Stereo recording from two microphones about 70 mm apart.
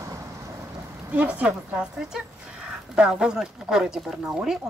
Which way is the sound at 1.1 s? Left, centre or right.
Centre.